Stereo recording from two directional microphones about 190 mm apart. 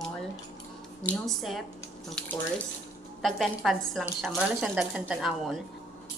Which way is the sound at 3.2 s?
Centre (ahead or behind).